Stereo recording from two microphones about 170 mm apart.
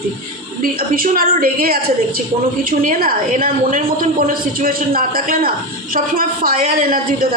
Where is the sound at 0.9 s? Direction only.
60° right (ahead or behind).